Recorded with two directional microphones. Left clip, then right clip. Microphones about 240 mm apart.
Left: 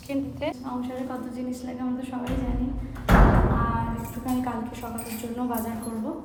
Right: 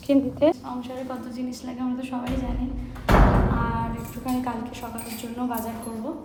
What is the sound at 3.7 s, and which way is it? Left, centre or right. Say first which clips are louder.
A woman's voice: even; centre.